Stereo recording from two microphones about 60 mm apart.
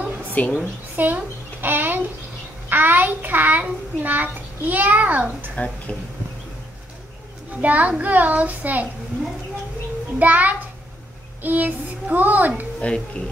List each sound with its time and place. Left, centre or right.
0.3 s a woman's voice: left
0.9 s a child's voice: right
5.9 s speech: centre
7.6 s a child's voice: right
10.1 s a child's voice: right